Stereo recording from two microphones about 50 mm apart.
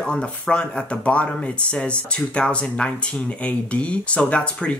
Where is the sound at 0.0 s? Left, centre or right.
Centre.